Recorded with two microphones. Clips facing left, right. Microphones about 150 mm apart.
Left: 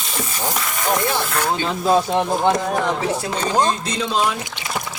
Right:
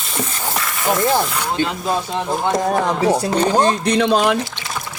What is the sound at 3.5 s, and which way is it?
Speech, 65° right (ahead or behind).